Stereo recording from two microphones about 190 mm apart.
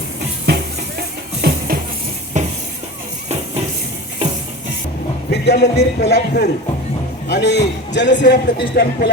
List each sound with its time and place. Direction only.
0.4 s music: 60° right (ahead or behind)
2.3 s a sound: 40° right (ahead or behind)
5.3 s music: 60° left (ahead or behind)
6.0 s a man's voice: 60° left (ahead or behind)